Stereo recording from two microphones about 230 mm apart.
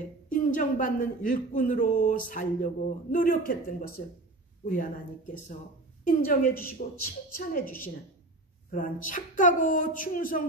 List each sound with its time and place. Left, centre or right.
0.3 s speech: left